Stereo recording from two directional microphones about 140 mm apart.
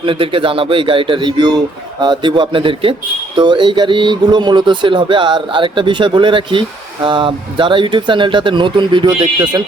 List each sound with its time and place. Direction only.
0.0 s speech: 40° right (ahead or behind)